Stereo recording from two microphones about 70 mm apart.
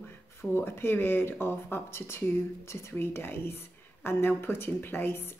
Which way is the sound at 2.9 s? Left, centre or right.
Left.